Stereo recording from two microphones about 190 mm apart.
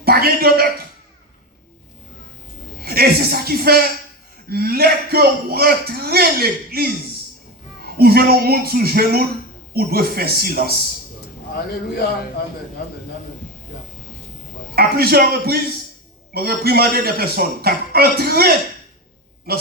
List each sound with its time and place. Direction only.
0.0 s a sound: 55° right (ahead or behind)
2.8 s a man's voice: 55° right (ahead or behind)
14.8 s a man's voice: 55° right (ahead or behind)